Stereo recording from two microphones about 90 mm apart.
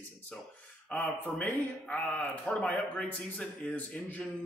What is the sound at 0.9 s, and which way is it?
Speech, 10° left (ahead or behind).